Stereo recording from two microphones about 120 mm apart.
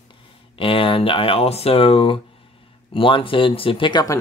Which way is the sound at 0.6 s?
50° left (ahead or behind).